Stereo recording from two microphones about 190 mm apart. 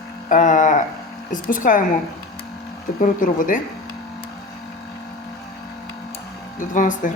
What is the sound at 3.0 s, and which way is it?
Speech, 45° left (ahead or behind).